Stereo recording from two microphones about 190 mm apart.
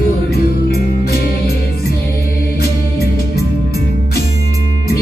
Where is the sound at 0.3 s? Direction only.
55° left (ahead or behind).